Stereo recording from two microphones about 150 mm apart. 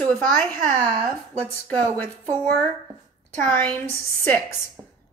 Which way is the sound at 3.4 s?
10° left (ahead or behind).